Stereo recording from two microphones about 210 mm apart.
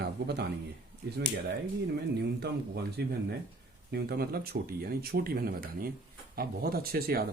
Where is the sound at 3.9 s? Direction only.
45° right (ahead or behind).